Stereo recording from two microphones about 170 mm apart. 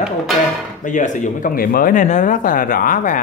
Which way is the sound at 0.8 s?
45° left (ahead or behind).